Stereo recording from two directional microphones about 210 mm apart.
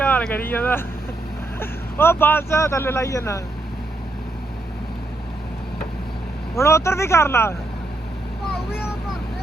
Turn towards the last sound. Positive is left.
turn(degrees=10)  # may be behind; listen again after turning